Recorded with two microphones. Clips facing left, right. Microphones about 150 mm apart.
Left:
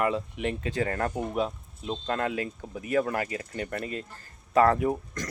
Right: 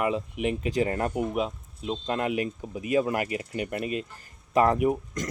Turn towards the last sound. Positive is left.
turn(degrees=-15)  # may be behind; listen again after turning